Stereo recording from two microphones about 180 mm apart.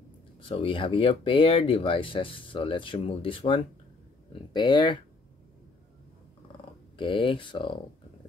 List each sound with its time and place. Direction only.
0.4 s speech: 30° left (ahead or behind)
7.0 s speech: 30° left (ahead or behind)